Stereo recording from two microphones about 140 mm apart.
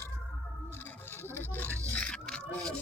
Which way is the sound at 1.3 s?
15° left (ahead or behind).